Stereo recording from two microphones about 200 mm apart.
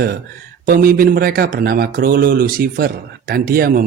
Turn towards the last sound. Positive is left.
turn(degrees=-45)  # may be behind; listen again after turning